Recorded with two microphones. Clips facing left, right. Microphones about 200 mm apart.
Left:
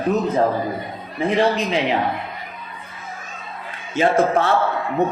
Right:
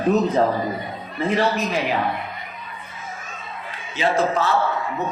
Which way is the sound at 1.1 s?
15° left (ahead or behind).